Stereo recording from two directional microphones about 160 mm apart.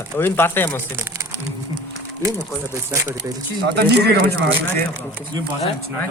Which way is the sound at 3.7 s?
90° right.